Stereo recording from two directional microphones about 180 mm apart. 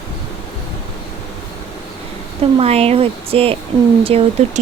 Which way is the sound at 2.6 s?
35° right (ahead or behind).